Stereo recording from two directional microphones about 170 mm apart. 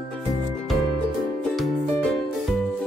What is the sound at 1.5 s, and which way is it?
Music, centre (ahead or behind).